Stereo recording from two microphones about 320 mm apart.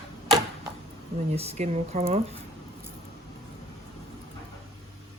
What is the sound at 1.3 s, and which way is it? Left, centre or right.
Speech, centre.